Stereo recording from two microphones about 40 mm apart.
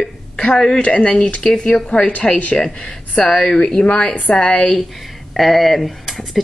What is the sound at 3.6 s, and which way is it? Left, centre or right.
Speech, left.